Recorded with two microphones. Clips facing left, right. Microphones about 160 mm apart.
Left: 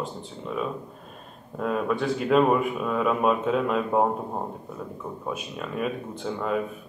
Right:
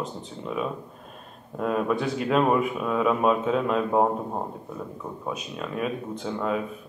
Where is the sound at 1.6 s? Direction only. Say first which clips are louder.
Right 1 dB; centre (ahead or behind).